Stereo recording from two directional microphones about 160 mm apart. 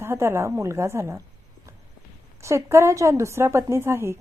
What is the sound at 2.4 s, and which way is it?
A woman's voice, 20° right (ahead or behind).